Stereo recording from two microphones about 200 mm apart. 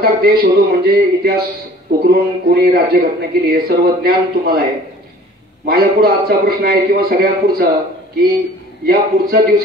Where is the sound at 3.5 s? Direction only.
50° right (ahead or behind).